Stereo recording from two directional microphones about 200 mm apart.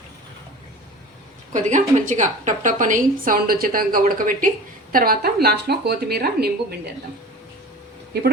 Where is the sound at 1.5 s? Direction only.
40° right (ahead or behind).